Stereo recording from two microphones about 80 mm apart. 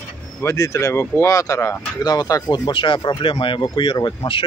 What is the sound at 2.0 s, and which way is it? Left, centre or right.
Speech, left.